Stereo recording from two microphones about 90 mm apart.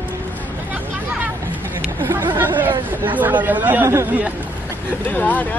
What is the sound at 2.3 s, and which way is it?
Chatter, 20° right (ahead or behind).